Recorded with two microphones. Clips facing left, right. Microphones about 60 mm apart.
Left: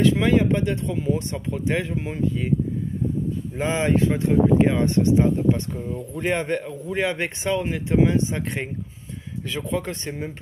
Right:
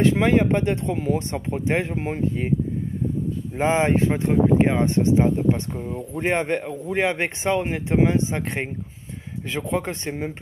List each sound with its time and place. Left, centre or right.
0.0 s speech: right
3.5 s speech: right